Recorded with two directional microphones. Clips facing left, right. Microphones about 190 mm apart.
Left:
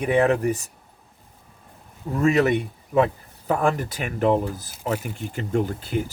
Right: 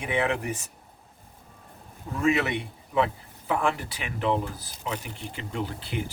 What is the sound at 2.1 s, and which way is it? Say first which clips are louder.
Speech: left 6 dB; 40° left (ahead or behind).